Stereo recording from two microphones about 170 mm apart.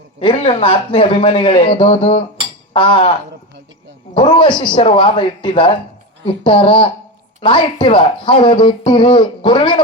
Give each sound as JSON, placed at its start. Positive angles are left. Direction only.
{"t": 0.2, "sound": "speech", "side_deg": 35}